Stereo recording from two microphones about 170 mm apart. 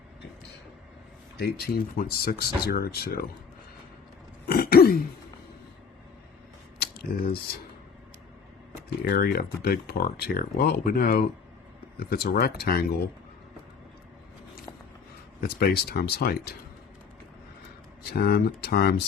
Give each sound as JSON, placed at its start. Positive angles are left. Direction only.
{"t": 1.4, "sound": "speech", "side_deg": 65}
{"t": 4.4, "sound": "throat clearing", "side_deg": 60}
{"t": 6.7, "sound": "camera", "side_deg": 65}
{"t": 9.0, "sound": "speech", "side_deg": 65}
{"t": 15.4, "sound": "speech", "side_deg": 60}
{"t": 18.0, "sound": "speech", "side_deg": 65}